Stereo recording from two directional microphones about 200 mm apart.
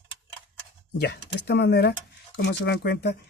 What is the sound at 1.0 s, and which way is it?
Speech, 55° left (ahead or behind).